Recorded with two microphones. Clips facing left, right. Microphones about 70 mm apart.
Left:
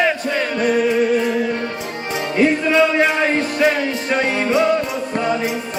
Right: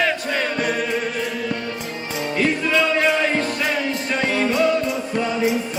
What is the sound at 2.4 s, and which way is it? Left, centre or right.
Music, left.